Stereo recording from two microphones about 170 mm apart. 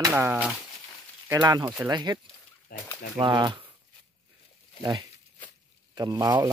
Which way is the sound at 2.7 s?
60° left (ahead or behind).